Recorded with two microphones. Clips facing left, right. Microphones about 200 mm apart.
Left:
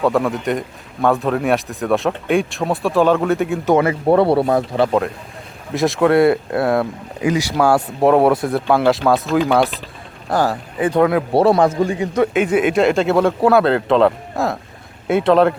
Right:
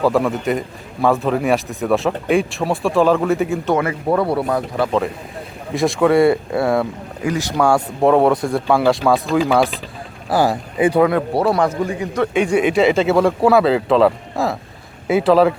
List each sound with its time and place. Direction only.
0.0 s speech: centre (ahead or behind)
3.8 s speech: 30° left (ahead or behind)
4.9 s speech: 5° left (ahead or behind)
7.2 s speech: 15° left (ahead or behind); by 11.0 s 10° right (ahead or behind)
11.3 s speech: 25° left (ahead or behind)
12.3 s speech: centre (ahead or behind)